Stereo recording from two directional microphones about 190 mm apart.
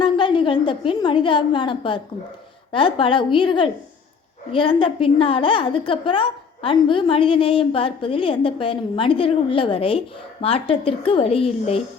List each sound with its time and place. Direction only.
0.0 s a woman's voice: 25° left (ahead or behind)